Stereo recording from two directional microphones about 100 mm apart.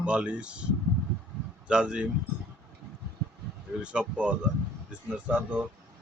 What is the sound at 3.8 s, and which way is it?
Speech, 10° right (ahead or behind).